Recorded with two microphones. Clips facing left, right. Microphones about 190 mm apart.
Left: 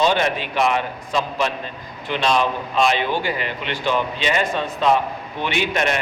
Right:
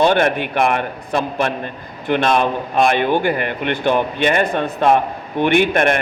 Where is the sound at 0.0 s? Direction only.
55° right (ahead or behind).